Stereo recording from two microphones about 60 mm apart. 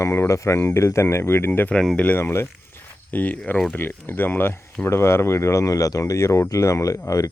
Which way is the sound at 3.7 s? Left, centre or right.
Left.